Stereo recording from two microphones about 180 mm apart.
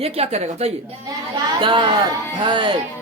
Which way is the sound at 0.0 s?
35° right (ahead or behind).